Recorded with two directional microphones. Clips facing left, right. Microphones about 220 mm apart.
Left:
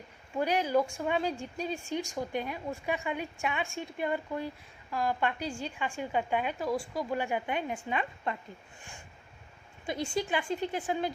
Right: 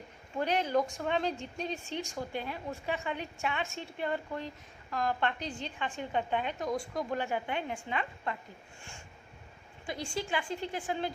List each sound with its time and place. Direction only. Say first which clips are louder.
0.3 s a woman's voice: left 2 dB; 10° left (ahead or behind)
9.8 s a woman's voice: left 4 dB; 20° left (ahead or behind)